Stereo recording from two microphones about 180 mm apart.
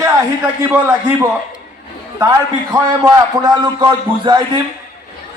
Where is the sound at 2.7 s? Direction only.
20° right (ahead or behind).